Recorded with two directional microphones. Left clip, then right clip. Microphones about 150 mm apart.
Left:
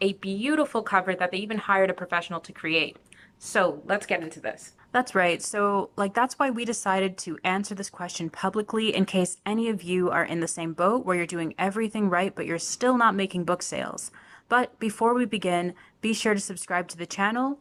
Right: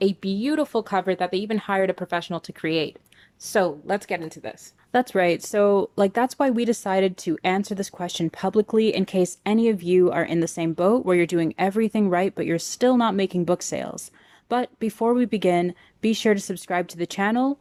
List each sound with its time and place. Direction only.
0.0 s speech: 35° right (ahead or behind)